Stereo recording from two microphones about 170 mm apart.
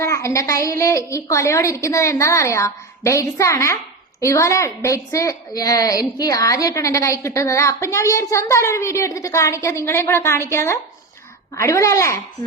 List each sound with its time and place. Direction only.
0.0 s a woman's voice: 15° left (ahead or behind)